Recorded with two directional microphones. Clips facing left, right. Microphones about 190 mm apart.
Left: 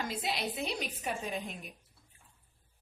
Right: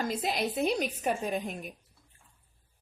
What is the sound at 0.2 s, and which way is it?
A woman's voice, 45° right (ahead or behind).